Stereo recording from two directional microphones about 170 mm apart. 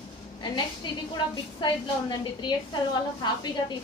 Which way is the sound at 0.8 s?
30° left (ahead or behind).